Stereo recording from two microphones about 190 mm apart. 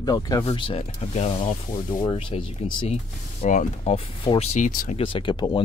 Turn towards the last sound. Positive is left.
turn(degrees=25)  # may be behind; listen again after turning